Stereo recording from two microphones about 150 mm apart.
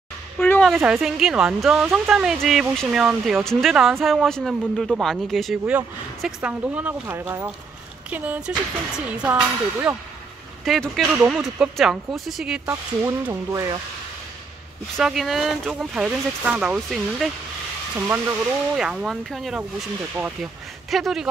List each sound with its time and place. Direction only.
0.4 s a sound: 10° left (ahead or behind)
0.7 s speech: centre (ahead or behind)
12.6 s speech: 20° right (ahead or behind)
15.0 s speech: centre (ahead or behind)
17.9 s speech: 15° right (ahead or behind)
18.8 s speech: 5° right (ahead or behind)
20.9 s speech: centre (ahead or behind)